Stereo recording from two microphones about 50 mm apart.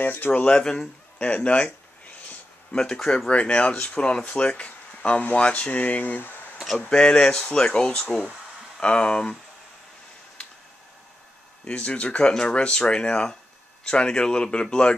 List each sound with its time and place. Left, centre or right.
0.0 s speech: left
0.5 s speech: centre; by 6.3 s left
6.9 s speech: centre
11.6 s speech: left